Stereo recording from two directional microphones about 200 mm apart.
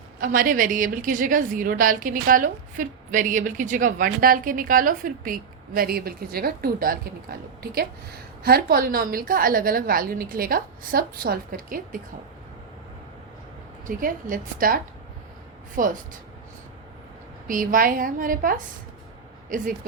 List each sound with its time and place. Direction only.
0.2 s a woman's voice: 45° right (ahead or behind)
8.4 s a woman's voice: 50° right (ahead or behind)
13.8 s a woman's voice: 40° right (ahead or behind)
15.8 s speech: 40° right (ahead or behind)
17.5 s a woman's voice: 45° right (ahead or behind)